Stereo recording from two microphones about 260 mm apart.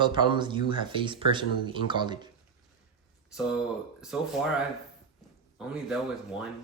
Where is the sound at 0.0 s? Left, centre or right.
Centre.